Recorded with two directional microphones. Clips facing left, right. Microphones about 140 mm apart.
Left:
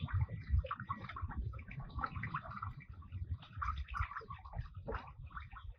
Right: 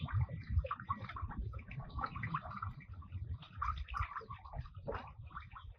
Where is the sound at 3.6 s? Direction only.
40° right (ahead or behind).